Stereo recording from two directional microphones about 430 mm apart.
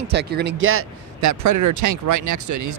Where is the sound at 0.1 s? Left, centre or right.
Right.